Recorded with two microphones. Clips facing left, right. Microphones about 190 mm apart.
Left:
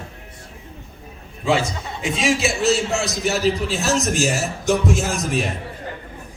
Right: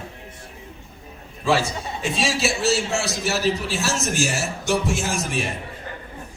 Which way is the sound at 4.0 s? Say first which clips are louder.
Left 3 dB; 35° left (ahead or behind).